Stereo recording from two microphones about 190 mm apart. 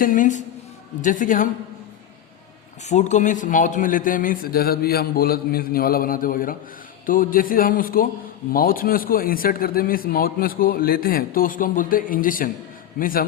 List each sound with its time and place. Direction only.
0.0 s a man's voice: 45° left (ahead or behind)
2.9 s a man's voice: 40° left (ahead or behind)